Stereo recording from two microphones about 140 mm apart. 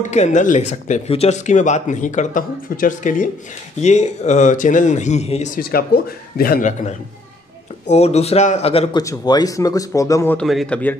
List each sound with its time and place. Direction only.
0.0 s speech: 55° left (ahead or behind)
3.8 s speech: 55° left (ahead or behind)
7.8 s speech: 50° left (ahead or behind)
8.9 s speech: 30° left (ahead or behind)
10.3 s a man's voice: centre (ahead or behind)